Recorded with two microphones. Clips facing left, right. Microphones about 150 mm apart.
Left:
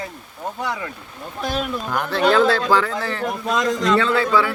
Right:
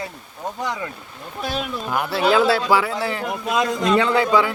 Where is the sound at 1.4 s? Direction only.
5° right (ahead or behind).